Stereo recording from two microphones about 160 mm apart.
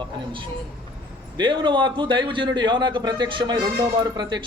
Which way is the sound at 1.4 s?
30° right (ahead or behind).